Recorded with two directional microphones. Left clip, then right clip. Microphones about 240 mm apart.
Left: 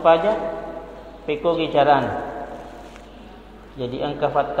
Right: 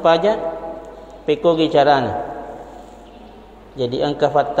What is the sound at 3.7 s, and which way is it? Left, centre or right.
Speech, right.